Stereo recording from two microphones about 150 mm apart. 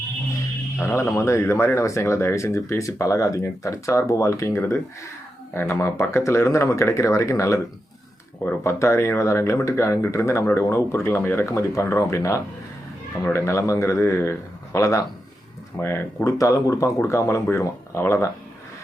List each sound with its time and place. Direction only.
0.8 s speech: 15° left (ahead or behind)